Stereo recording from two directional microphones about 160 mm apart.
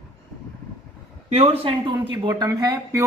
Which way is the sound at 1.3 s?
40° right (ahead or behind).